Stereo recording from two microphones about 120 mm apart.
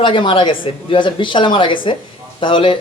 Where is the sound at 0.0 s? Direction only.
45° left (ahead or behind).